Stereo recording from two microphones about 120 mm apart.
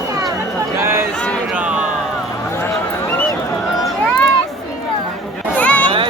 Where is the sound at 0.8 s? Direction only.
20° right (ahead or behind).